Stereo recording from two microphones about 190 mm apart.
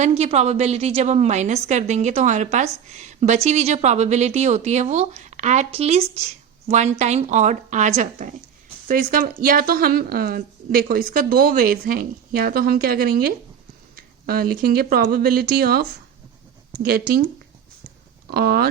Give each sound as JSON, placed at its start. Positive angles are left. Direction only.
{"t": 0.0, "sound": "a woman's voice", "side_deg": -35}
{"t": 8.9, "sound": "a woman's voice", "side_deg": -50}
{"t": 16.9, "sound": "a woman's voice", "side_deg": -50}
{"t": 18.3, "sound": "speech", "side_deg": -55}